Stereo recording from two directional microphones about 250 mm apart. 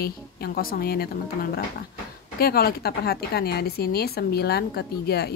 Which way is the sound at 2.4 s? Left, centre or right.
Left.